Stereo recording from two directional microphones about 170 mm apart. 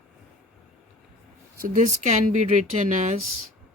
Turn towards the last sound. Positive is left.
turn(degrees=-45)  # may be behind; listen again after turning